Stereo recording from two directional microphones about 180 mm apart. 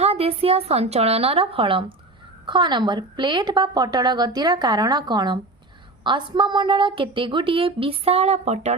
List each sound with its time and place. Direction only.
0.0 s a woman's voice: 35° right (ahead or behind)